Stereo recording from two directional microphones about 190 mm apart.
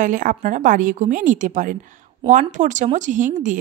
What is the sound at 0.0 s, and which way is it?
A woman's voice, 45° right (ahead or behind).